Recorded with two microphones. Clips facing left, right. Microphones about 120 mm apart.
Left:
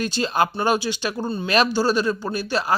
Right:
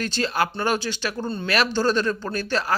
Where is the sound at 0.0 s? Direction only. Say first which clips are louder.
Left 3 dB; 15° left (ahead or behind).